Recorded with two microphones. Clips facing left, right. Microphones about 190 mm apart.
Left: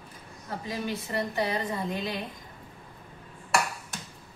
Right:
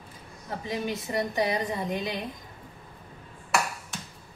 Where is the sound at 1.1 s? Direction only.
15° right (ahead or behind).